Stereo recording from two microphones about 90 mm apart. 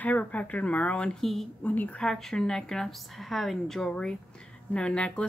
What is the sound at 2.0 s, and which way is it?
Speech, 5° left (ahead or behind).